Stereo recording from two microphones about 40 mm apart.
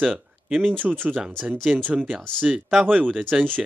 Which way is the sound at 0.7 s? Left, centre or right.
Right.